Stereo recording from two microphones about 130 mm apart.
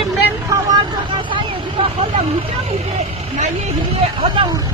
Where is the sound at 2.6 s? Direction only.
50° right (ahead or behind).